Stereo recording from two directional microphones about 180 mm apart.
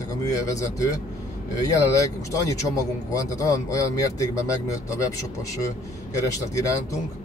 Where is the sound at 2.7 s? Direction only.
15° left (ahead or behind).